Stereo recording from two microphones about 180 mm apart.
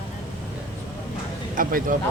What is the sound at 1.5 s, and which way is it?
Speech, 50° right (ahead or behind).